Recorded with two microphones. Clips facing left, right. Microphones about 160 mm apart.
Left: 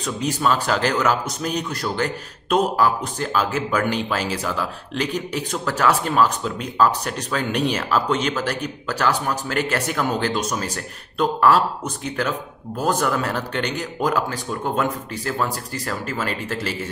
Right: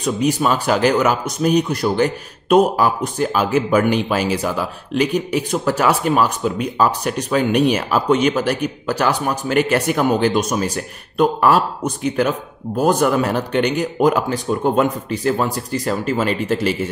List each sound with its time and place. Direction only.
0.0 s speech: 15° right (ahead or behind)